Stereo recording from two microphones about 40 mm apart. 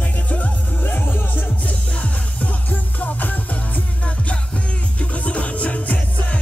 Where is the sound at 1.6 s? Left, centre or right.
Left.